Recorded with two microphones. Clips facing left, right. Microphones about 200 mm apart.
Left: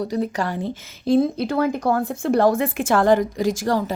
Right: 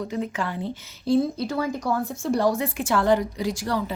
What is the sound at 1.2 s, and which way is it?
A woman's voice, 60° left (ahead or behind).